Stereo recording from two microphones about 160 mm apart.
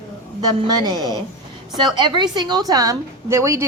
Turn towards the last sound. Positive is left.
turn(degrees=-20)  # may be behind; listen again after turning